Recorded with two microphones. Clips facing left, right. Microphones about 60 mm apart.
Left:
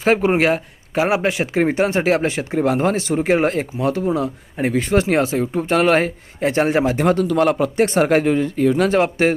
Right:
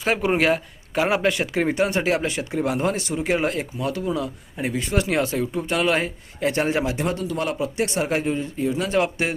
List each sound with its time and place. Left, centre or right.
0.0 s speech: left
5.4 s speech: left
7.0 s speech: left
8.9 s speech: left